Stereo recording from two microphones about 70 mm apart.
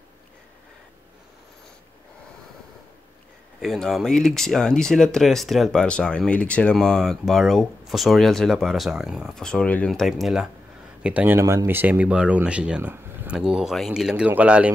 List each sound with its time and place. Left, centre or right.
3.6 s speech: centre
6.8 s speech: centre
9.3 s speech: centre
11.0 s speech: centre
11.2 s speech: right; by 12.8 s centre
12.8 s a sound: right
13.3 s speech: centre
14.1 s speech: centre